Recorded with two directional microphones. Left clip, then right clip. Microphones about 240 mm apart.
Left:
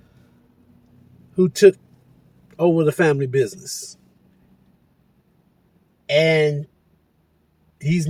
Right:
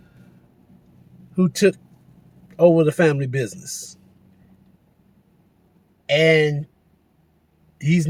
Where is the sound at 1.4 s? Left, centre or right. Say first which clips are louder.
Left 5 dB; centre.